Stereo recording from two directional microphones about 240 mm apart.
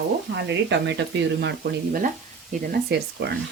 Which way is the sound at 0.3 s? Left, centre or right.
Right.